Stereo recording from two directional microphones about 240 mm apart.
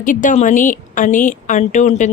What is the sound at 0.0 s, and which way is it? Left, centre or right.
A woman's voice, left.